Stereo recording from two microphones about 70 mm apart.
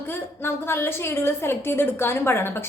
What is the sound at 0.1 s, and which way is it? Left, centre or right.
A woman's voice, left.